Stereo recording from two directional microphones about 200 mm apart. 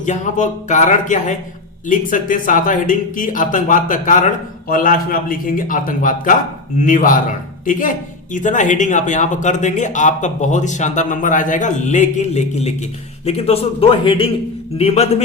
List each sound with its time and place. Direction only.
0.0 s a man's voice: 40° left (ahead or behind)